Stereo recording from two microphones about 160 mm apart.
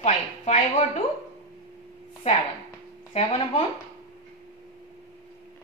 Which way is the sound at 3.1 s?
35° left (ahead or behind).